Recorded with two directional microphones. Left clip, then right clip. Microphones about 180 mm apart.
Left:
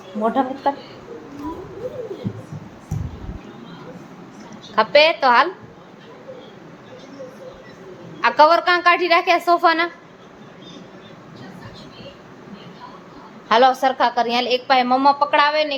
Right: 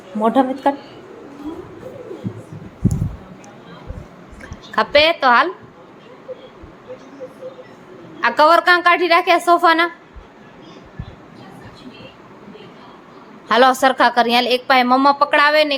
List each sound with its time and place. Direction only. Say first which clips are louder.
0.2 s a woman's voice: right 4 dB; 25° right (ahead or behind)
4.7 s a woman's voice: even; 10° right (ahead or behind)
8.2 s a woman's voice: right 1 dB; 15° right (ahead or behind)
13.5 s a woman's voice: right 2 dB; 25° right (ahead or behind)